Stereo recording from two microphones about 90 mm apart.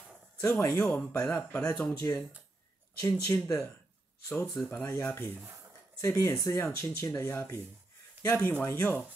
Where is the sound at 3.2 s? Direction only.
35° left (ahead or behind).